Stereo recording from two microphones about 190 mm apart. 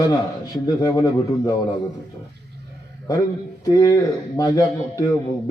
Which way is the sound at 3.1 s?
20° left (ahead or behind).